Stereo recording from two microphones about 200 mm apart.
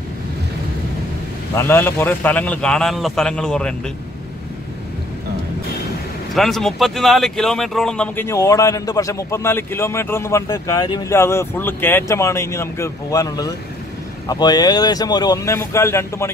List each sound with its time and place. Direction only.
1.5 s a man's voice: 10° left (ahead or behind)
6.3 s speech: centre (ahead or behind)